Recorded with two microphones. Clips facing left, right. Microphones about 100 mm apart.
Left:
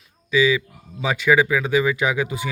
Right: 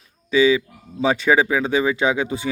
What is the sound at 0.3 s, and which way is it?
Speech, 30° right (ahead or behind).